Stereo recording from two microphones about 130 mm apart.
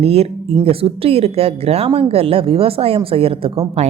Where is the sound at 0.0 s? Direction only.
50° right (ahead or behind).